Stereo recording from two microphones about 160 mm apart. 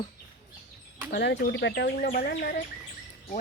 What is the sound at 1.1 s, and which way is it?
Speech, 90° left.